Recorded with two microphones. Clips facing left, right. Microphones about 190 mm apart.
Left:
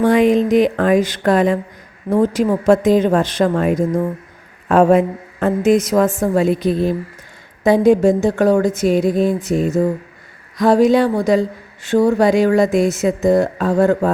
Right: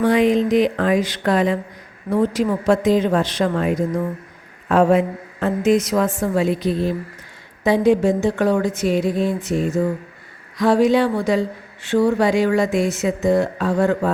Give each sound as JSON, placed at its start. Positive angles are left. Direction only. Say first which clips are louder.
{"t": 0.0, "sound": "speech", "louder": "left 3 dB", "side_deg": 50}